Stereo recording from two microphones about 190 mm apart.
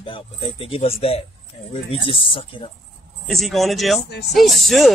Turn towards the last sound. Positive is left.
turn(degrees=0)  # may be behind; listen again after turning